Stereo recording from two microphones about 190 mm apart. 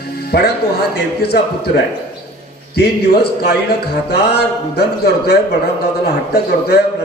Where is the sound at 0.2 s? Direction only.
55° left (ahead or behind).